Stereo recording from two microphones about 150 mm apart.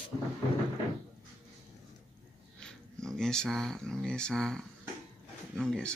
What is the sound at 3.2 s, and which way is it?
Speech, 5° left (ahead or behind).